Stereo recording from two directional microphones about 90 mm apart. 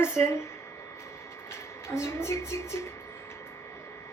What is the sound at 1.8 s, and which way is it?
A woman's voice, 30° left (ahead or behind).